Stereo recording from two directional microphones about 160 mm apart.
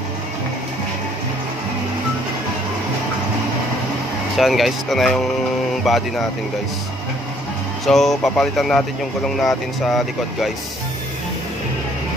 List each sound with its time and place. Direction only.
4.4 s speech: centre (ahead or behind)
7.8 s speech: centre (ahead or behind)